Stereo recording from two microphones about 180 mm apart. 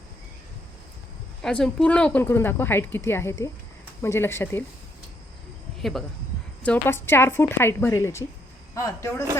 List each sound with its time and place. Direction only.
1.4 s a woman's voice: 5° left (ahead or behind)
6.6 s a woman's voice: 10° left (ahead or behind)